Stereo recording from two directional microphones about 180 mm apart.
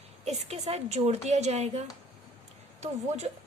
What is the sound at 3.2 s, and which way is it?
Speech, 35° right (ahead or behind).